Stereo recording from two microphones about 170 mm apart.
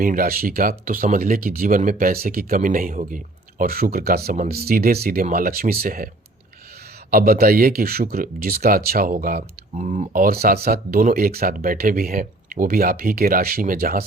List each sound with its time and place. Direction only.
0.0 s speech: 55° right (ahead or behind)
7.1 s speech: 60° right (ahead or behind)